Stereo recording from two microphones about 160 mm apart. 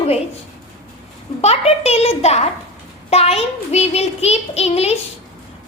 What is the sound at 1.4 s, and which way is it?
Child singing, 40° left (ahead or behind).